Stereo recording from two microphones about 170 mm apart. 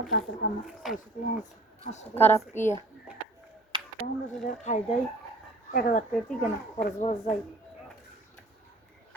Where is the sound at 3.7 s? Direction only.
30° right (ahead or behind).